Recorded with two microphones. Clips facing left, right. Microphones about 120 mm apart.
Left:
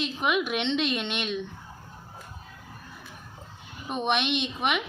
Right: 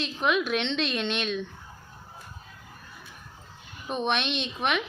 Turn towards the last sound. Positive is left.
turn(degrees=15)  # may be behind; listen again after turning